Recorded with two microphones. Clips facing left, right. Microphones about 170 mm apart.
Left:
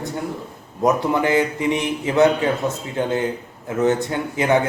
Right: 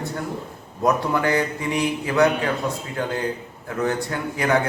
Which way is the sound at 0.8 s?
20° left (ahead or behind).